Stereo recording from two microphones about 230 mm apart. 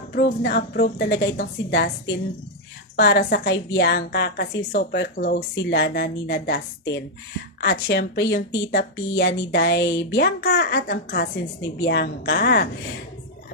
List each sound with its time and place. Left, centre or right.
0.1 s a woman's voice: left
2.9 s a woman's voice: left